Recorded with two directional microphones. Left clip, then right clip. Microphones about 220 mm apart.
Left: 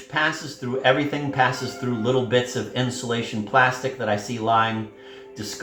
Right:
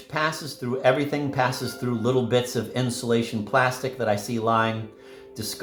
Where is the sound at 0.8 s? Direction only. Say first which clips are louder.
Left 1 dB; 55° right (ahead or behind).